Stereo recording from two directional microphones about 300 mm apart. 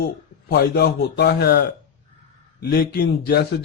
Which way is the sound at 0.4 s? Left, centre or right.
Left.